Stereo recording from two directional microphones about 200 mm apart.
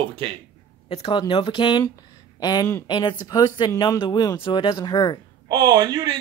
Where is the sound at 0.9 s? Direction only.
30° left (ahead or behind).